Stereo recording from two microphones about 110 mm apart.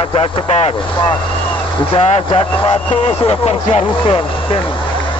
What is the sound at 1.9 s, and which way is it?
Speech, 60° left (ahead or behind).